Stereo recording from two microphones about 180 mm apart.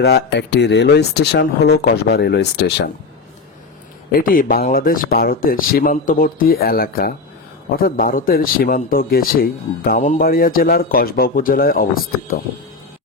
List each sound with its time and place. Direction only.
0.0 s speech: 65° left (ahead or behind)
4.1 s speech: 50° left (ahead or behind)